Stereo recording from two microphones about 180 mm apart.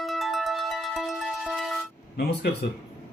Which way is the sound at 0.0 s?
Centre (ahead or behind).